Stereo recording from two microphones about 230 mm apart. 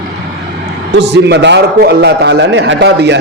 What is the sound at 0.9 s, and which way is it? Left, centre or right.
A man's voice, right.